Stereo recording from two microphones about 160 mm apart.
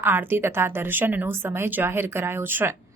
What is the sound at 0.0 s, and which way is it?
A woman's voice, 15° right (ahead or behind).